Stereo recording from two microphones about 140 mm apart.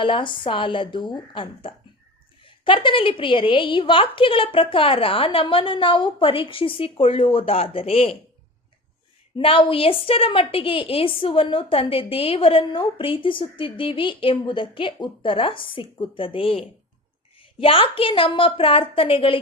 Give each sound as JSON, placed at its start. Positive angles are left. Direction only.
{"t": 0.0, "sound": "a woman's voice", "side_deg": 35}
{"t": 9.4, "sound": "a woman's voice", "side_deg": 40}